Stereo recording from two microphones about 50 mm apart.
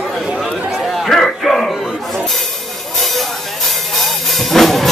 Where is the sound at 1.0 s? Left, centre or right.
Centre.